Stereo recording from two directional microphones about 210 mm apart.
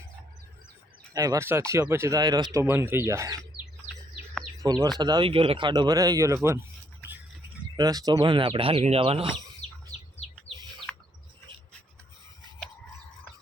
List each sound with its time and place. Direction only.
1.1 s speech: 15° right (ahead or behind)
4.6 s speech: 20° right (ahead or behind)
7.8 s speech: 20° right (ahead or behind)
10.9 s bird: 5° left (ahead or behind)